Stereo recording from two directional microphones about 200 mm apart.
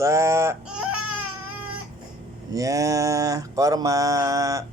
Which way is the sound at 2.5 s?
15° right (ahead or behind).